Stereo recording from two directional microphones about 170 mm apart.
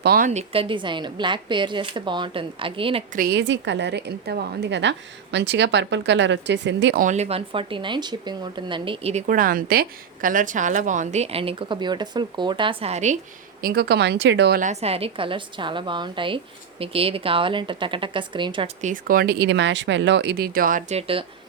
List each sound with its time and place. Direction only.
0.0 s speech: 65° right (ahead or behind)
0.3 s a woman's voice: 35° right (ahead or behind)
3.2 s a woman's voice: 75° right (ahead or behind); by 7.0 s 90° right
7.0 s speech: 45° right (ahead or behind)
9.2 s a woman's voice: 55° right (ahead or behind)
13.6 s speech: 60° right (ahead or behind); by 14.6 s 90° right
14.6 s a woman's voice: 40° right (ahead or behind)
18.8 s speech: 50° right (ahead or behind)
20.9 s speech: 30° right (ahead or behind)